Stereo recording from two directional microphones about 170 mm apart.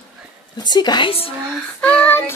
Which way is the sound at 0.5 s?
25° left (ahead or behind).